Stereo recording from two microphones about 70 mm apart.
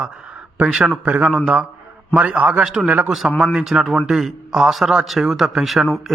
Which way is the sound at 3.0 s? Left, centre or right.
Centre.